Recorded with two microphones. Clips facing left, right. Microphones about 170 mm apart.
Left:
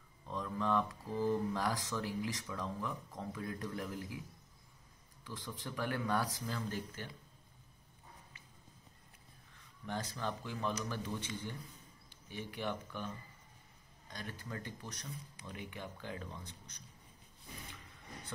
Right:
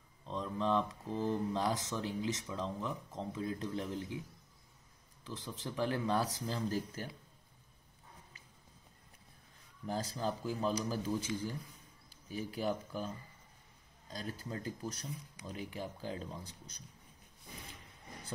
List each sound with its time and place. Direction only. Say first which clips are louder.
0.2 s speech: right 2 dB; 20° right (ahead or behind)
5.2 s speech: right 2 dB; 25° right (ahead or behind)
9.8 s speech: right 3 dB; 35° right (ahead or behind)
12.3 s speech: right 4 dB; 35° right (ahead or behind)
14.1 s speech: right 3 dB; 30° right (ahead or behind)